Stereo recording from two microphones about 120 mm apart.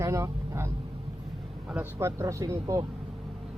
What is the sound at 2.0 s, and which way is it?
Speech, 25° right (ahead or behind).